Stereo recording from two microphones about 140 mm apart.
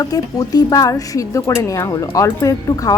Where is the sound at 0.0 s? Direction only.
25° left (ahead or behind).